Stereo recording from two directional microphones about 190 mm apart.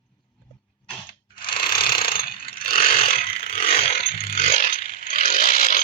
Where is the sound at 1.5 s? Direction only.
50° left (ahead or behind).